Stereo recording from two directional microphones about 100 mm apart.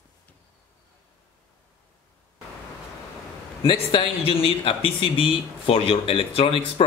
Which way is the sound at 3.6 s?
65° left (ahead or behind).